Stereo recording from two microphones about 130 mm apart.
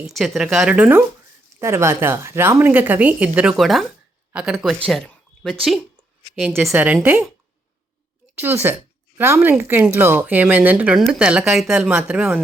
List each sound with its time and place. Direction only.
0.1 s speech: centre (ahead or behind)
4.9 s a sound: 5° left (ahead or behind)
6.6 s speech: centre (ahead or behind)
6.8 s speech: 10° right (ahead or behind)
8.4 s speech: 15° right (ahead or behind)